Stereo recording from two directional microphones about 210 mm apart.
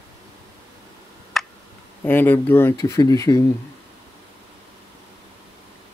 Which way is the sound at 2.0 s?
10° left (ahead or behind).